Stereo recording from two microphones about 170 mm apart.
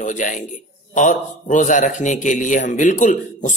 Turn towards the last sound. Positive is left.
turn(degrees=50)  # may be behind; listen again after turning